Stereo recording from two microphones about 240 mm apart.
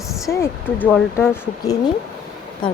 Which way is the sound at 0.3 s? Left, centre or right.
Centre.